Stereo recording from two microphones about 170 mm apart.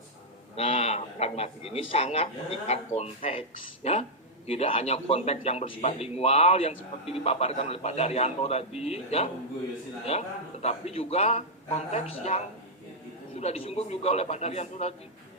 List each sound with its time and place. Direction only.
0.5 s a man's voice: 35° left (ahead or behind)